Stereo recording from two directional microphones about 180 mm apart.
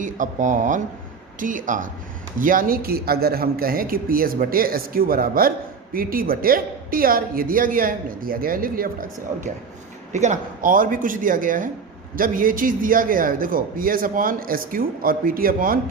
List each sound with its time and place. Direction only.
0.0 s speech: 45° right (ahead or behind)
10.1 s speech: 40° right (ahead or behind)